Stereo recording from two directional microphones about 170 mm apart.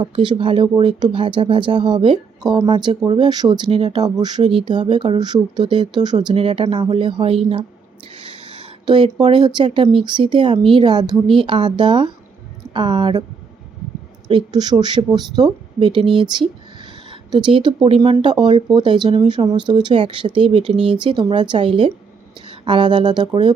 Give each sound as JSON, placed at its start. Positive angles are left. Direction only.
{"t": 0.0, "sound": "speech", "side_deg": -30}
{"t": 8.1, "sound": "a sound", "side_deg": -30}
{"t": 9.3, "sound": "speech", "side_deg": -25}
{"t": 14.3, "sound": "speech", "side_deg": -25}
{"t": 17.1, "sound": "speech", "side_deg": -30}
{"t": 20.7, "sound": "speech", "side_deg": -5}
{"t": 21.0, "sound": "speech", "side_deg": -30}